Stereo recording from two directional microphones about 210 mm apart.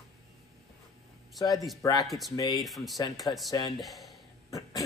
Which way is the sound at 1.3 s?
15° left (ahead or behind).